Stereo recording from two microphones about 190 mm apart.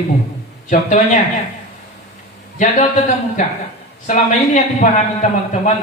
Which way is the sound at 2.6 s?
40° left (ahead or behind).